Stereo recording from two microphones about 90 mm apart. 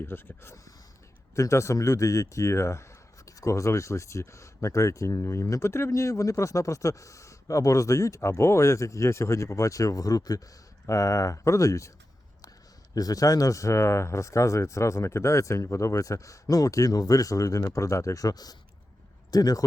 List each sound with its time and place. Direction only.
0.0 s speech: 25° left (ahead or behind)
12.9 s speech: 45° left (ahead or behind)